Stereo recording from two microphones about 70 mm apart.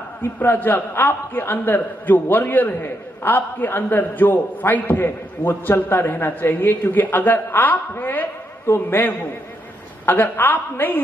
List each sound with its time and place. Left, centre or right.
0.2 s a man's voice: left